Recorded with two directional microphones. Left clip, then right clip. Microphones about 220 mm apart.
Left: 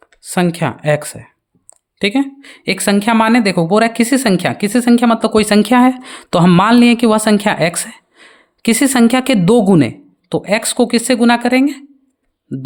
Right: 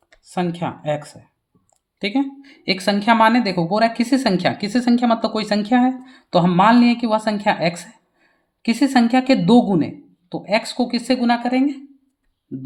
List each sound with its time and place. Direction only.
0.3 s speech: 45° left (ahead or behind)